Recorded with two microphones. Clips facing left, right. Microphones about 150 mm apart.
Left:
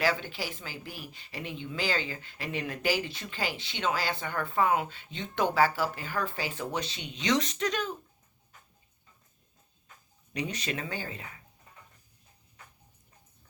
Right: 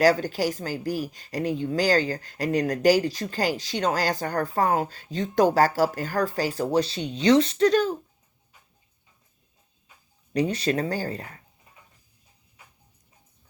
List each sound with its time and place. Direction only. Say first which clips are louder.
0.0 s speech: right 10 dB; 40° right (ahead or behind)
10.3 s speech: right 10 dB; 35° right (ahead or behind)
12.6 s music: left 1 dB; 10° right (ahead or behind)